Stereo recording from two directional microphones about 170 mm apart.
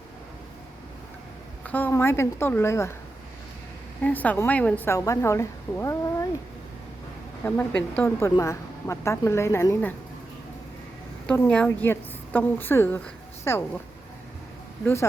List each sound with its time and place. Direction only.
1.6 s a woman's voice: 10° left (ahead or behind)
4.0 s a woman's voice: 10° left (ahead or behind)
7.4 s a woman's voice: 10° left (ahead or behind)
11.3 s a woman's voice: 5° left (ahead or behind)